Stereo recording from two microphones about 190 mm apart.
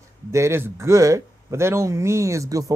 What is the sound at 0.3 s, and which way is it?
Speech, 15° right (ahead or behind).